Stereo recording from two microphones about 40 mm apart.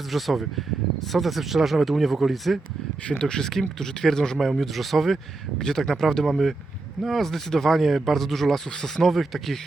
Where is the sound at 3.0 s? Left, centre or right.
Left.